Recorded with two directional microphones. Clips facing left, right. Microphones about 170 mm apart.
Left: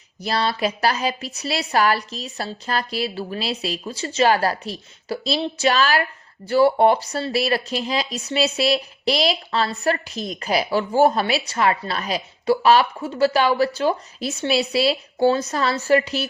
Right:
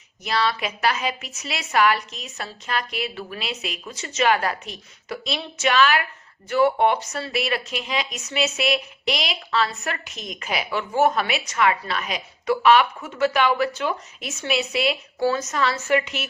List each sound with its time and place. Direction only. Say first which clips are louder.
0.2 s speech: left 2 dB; 35° left (ahead or behind)